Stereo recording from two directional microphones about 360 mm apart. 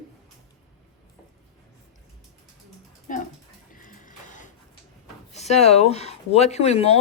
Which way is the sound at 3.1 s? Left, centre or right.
Left.